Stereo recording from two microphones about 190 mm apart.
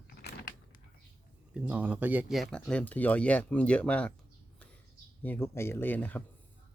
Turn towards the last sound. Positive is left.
turn(degrees=10)  # may be behind; listen again after turning